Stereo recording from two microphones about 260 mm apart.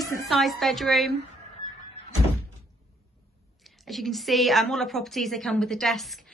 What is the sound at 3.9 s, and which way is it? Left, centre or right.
Speech, centre.